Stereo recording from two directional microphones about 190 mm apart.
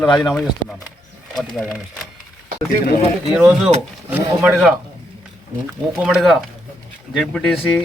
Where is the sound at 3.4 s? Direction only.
5° right (ahead or behind).